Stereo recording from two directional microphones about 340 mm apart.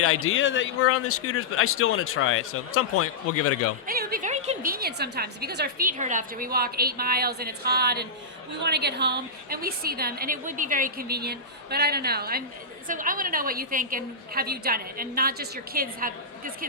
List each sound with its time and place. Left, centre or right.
0.0 s speech: left
3.8 s a woman's voice: right